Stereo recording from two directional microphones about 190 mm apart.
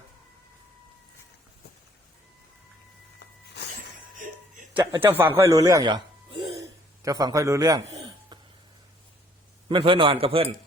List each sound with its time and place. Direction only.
3.2 s a sound: 60° left (ahead or behind)
4.2 s music: 45° right (ahead or behind)
4.7 s a man's voice: 20° right (ahead or behind)
9.6 s a man's voice: 25° right (ahead or behind)